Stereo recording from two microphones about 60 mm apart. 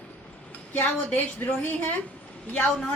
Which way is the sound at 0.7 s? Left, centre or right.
Left.